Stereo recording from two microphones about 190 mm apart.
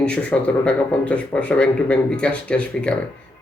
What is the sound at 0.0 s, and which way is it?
Speech, 5° left (ahead or behind).